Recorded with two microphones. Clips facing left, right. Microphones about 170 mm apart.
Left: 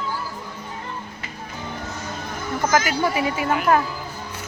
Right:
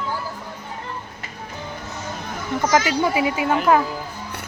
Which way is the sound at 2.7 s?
25° right (ahead or behind).